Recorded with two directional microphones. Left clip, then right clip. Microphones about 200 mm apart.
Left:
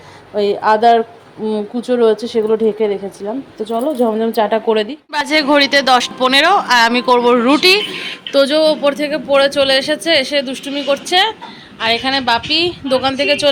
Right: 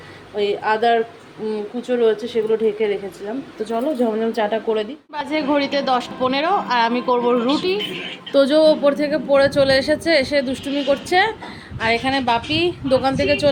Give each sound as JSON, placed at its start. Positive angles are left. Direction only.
{"t": 0.3, "sound": "a woman's voice", "side_deg": 15}
{"t": 8.3, "sound": "speech", "side_deg": -10}